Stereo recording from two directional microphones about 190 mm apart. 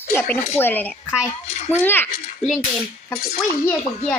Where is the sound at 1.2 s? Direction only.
35° left (ahead or behind).